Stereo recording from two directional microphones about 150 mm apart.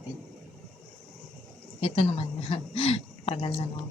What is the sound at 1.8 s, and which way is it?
A woman's voice, 40° left (ahead or behind).